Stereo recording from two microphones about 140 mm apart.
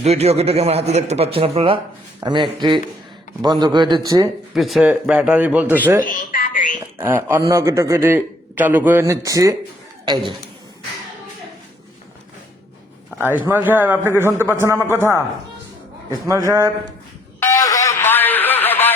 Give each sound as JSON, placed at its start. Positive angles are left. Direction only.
{"t": 0.0, "sound": "a man's voice", "side_deg": -50}
{"t": 4.5, "sound": "a man's voice", "side_deg": 0}
{"t": 6.0, "sound": "speech", "side_deg": 80}
{"t": 7.0, "sound": "a man's voice", "side_deg": -15}
{"t": 13.3, "sound": "a man's voice", "side_deg": -10}
{"t": 16.2, "sound": "a man's voice", "side_deg": -20}
{"t": 17.4, "sound": "a sound", "side_deg": 25}